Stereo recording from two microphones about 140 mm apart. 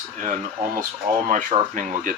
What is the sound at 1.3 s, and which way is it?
Speech, 65° right (ahead or behind).